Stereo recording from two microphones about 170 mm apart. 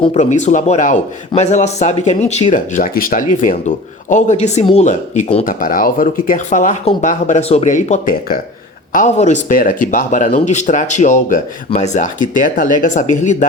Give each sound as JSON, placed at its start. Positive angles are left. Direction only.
{"t": 0.0, "sound": "speech", "side_deg": 40}
{"t": 5.5, "sound": "speech", "side_deg": 55}